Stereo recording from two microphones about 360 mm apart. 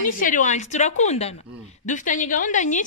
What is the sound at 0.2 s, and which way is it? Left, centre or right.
A woman's voice, left.